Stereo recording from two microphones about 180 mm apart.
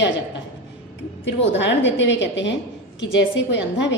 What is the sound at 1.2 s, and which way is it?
A woman's voice, 80° left.